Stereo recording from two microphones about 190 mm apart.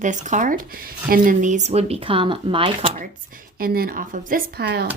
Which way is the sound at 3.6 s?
50° right (ahead or behind).